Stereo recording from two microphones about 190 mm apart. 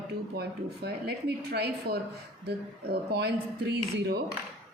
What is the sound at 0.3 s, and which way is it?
Speech, 60° right (ahead or behind).